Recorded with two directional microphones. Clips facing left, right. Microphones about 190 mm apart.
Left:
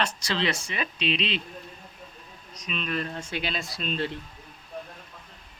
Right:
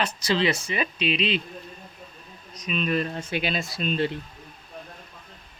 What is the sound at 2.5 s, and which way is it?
Speech, 5° right (ahead or behind).